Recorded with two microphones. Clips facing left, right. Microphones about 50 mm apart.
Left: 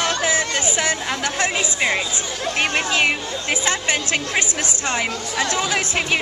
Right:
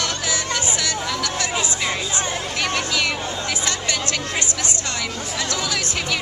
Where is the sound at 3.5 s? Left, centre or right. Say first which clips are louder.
Left 7 dB; left.